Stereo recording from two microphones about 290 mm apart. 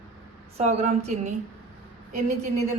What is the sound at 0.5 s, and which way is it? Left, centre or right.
A woman's voice, right.